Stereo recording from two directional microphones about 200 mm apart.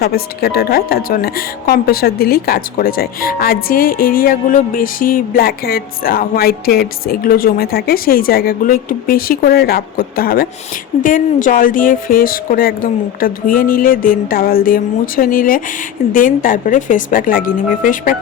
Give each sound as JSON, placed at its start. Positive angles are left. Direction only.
{"t": 0.0, "sound": "speech", "side_deg": 50}